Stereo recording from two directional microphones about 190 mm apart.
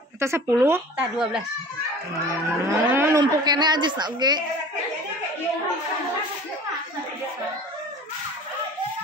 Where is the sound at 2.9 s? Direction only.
15° right (ahead or behind).